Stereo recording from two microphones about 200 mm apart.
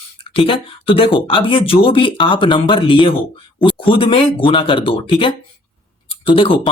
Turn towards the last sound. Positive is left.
turn(degrees=25)  # may be behind; listen again after turning